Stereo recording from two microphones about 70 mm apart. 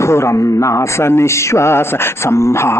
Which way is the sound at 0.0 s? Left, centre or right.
Left.